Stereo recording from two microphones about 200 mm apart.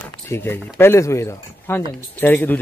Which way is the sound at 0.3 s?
10° left (ahead or behind).